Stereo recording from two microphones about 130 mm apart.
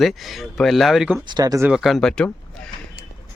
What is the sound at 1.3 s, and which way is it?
Speech, 30° right (ahead or behind).